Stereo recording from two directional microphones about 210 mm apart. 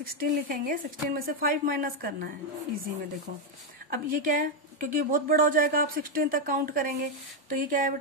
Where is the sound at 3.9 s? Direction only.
40° right (ahead or behind).